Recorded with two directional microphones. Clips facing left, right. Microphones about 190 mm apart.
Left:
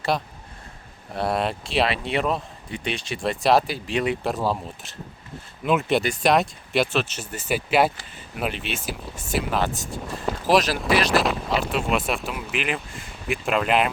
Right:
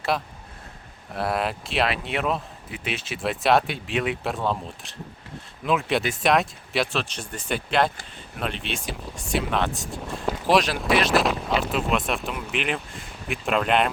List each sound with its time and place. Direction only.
0.1 s speech: centre (ahead or behind)